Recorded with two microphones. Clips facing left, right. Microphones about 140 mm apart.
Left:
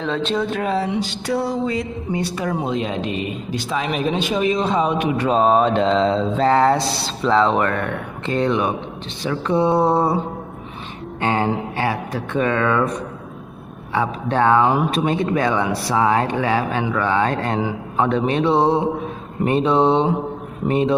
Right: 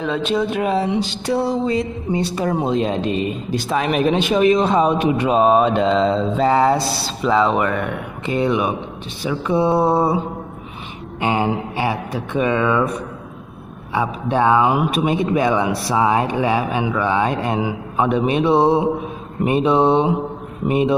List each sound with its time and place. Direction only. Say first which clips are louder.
0.0 s speech: right 2 dB; 10° right (ahead or behind); by 4.9 s 55° right (ahead or behind)
5.1 s speech: even; 15° right (ahead or behind)
11.1 s speech: right 1 dB; 15° right (ahead or behind)